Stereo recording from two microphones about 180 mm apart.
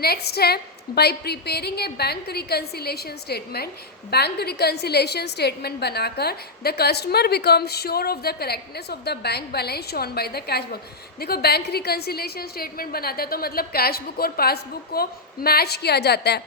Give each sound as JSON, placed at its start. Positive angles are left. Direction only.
{"t": 0.0, "sound": "a woman's voice", "side_deg": 60}